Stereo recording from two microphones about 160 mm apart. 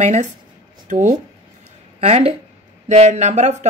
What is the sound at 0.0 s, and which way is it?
Speech, 45° right (ahead or behind).